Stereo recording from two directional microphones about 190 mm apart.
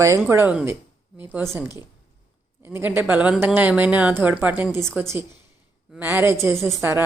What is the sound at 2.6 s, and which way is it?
A woman's voice, 10° right (ahead or behind).